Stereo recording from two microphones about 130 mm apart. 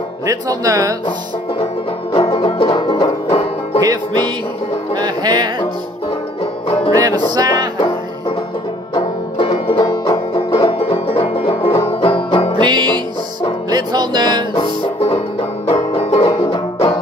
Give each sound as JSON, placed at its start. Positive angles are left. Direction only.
{"t": 0.3, "sound": "speech", "side_deg": -25}
{"t": 2.1, "sound": "banjo", "side_deg": 45}
{"t": 3.8, "sound": "music", "side_deg": -35}
{"t": 6.9, "sound": "music", "side_deg": -30}
{"t": 8.9, "sound": "banjo", "side_deg": 50}
{"t": 10.8, "sound": "music", "side_deg": 45}
{"t": 12.6, "sound": "music", "side_deg": -35}
{"t": 15.7, "sound": "banjo", "side_deg": 50}
{"t": 16.3, "sound": "music", "side_deg": 40}